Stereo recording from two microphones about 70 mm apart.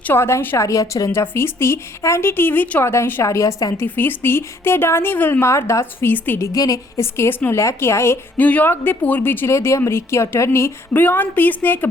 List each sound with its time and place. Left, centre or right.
0.1 s a woman's voice: left
1.1 s speech: left
2.8 s speech: left
3.2 s a woman's voice: left
3.8 s speech: left
5.5 s speech: left
6.1 s speech: left
6.4 s a woman's voice: left
7.0 s speech: left
7.5 s speech: left
8.4 s speech: left
9.5 s speech: left
11.0 s speech: left